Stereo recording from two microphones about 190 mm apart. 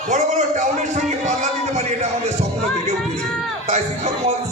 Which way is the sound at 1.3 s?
35° right (ahead or behind).